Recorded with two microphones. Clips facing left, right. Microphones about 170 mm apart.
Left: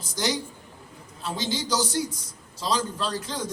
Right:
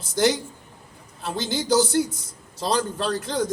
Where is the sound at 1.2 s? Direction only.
60° right (ahead or behind).